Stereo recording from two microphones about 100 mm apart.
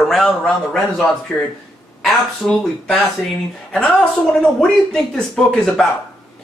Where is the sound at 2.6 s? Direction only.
5° left (ahead or behind).